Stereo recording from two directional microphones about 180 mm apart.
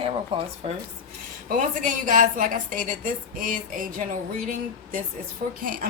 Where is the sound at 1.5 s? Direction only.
45° right (ahead or behind).